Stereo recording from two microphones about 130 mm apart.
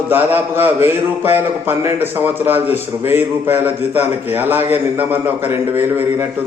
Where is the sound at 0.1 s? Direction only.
15° right (ahead or behind).